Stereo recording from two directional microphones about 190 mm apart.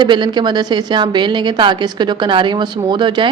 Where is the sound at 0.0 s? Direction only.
25° right (ahead or behind).